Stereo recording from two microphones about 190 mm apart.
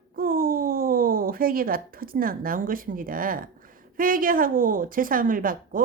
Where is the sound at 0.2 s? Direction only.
50° right (ahead or behind).